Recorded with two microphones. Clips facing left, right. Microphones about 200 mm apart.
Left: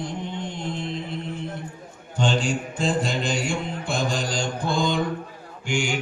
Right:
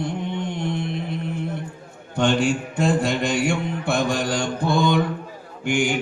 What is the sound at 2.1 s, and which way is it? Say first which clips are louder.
Mantra: right 4 dB; 65° right (ahead or behind).